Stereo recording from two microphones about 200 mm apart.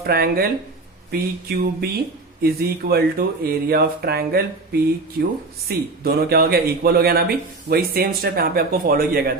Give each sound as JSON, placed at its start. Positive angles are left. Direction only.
{"t": 0.0, "sound": "speech", "side_deg": -50}
{"t": 5.6, "sound": "speech", "side_deg": -50}